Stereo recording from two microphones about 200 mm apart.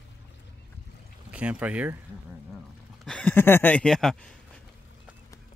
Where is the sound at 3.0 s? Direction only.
5° left (ahead or behind).